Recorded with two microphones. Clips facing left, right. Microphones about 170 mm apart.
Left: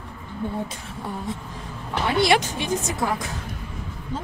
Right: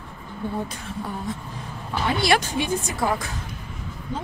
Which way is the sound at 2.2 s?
20° left (ahead or behind).